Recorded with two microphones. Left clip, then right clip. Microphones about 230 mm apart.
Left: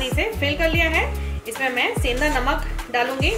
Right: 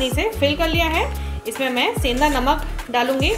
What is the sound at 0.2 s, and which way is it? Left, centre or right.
A woman's voice, right.